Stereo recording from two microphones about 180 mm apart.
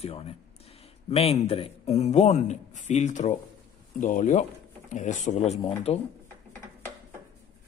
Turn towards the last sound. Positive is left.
turn(degrees=35)  # may be behind; listen again after turning